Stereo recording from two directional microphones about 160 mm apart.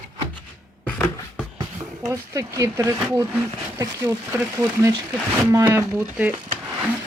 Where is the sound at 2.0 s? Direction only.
20° right (ahead or behind).